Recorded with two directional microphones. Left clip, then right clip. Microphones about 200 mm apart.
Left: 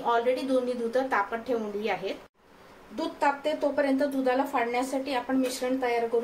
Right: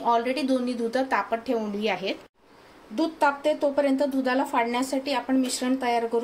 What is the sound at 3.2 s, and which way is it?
A woman's voice, 45° right (ahead or behind).